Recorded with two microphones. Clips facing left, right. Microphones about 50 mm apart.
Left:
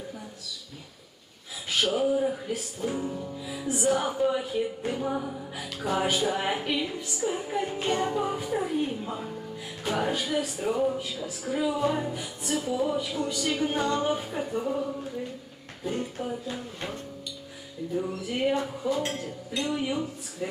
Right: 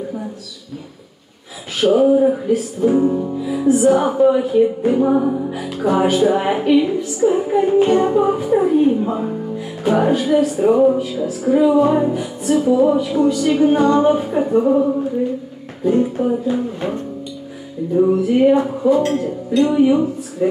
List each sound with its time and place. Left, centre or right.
1.8 s speech: centre
2.4 s music: centre
3.0 s music: right
3.3 s music: centre
3.8 s speech: centre; by 5.5 s right
5.5 s music: centre
7.2 s speech: right
9.6 s music: centre
11.0 s music: centre
13.4 s speech: centre; by 15.0 s right
15.9 s speech: right
18.1 s music: centre